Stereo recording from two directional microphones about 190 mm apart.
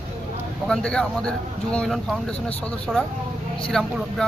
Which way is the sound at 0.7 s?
5° left (ahead or behind).